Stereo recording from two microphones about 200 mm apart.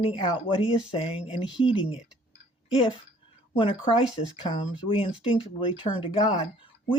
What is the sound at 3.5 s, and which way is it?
Speech, 25° left (ahead or behind).